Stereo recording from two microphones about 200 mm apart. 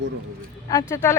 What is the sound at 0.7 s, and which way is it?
Speech, 15° left (ahead or behind).